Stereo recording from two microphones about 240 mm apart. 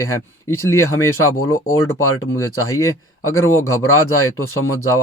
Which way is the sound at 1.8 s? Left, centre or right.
Left.